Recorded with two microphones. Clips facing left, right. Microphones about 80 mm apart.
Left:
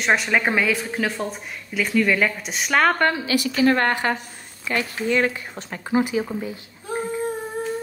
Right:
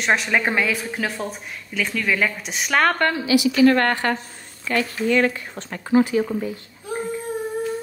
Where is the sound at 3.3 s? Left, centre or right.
Left.